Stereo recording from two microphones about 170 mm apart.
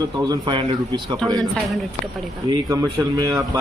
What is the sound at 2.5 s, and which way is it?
A man's voice, 20° right (ahead or behind).